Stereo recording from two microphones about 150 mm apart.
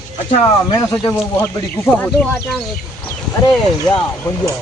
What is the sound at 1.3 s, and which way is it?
Speech, 10° left (ahead or behind).